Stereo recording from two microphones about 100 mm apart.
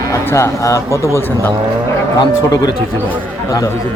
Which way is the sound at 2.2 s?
40° left (ahead or behind).